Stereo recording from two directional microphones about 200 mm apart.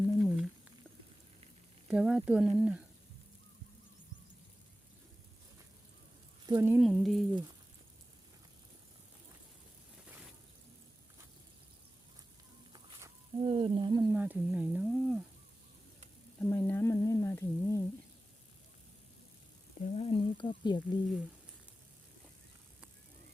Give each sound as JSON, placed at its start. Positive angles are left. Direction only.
{"t": 0.2, "sound": "a sound", "side_deg": 5}
{"t": 1.9, "sound": "speech", "side_deg": -5}
{"t": 6.4, "sound": "sizzle", "side_deg": -15}
{"t": 6.7, "sound": "speech", "side_deg": 0}
{"t": 12.7, "sound": "a sound", "side_deg": -20}
{"t": 14.1, "sound": "speech", "side_deg": -10}
{"t": 16.5, "sound": "humming", "side_deg": 10}
{"t": 19.8, "sound": "speech", "side_deg": 30}